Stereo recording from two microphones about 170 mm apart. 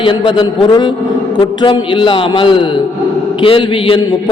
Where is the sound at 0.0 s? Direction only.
30° left (ahead or behind).